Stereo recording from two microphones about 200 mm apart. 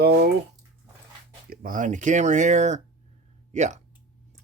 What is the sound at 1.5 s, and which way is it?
Speech, 45° right (ahead or behind).